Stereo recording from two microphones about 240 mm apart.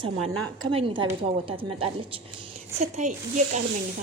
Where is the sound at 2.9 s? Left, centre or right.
Right.